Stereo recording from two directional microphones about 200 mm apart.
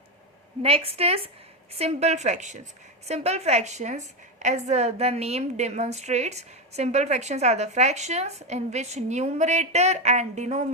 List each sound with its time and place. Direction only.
0.6 s a woman's voice: 30° right (ahead or behind)